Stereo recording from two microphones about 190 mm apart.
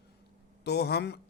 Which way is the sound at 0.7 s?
60° left (ahead or behind).